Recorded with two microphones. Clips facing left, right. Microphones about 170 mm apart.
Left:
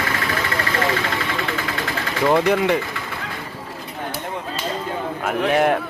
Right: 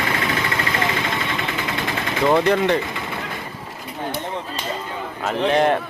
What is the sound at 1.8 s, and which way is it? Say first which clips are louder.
Vehicle: right 1 dB; 20° right (ahead or behind).